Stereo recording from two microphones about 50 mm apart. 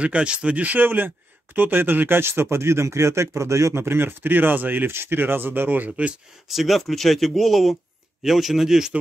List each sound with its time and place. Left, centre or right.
0.0 s speech: right
2.5 s speech: right
3.7 s speech: right
5.9 s speech: right
6.5 s a man's voice: centre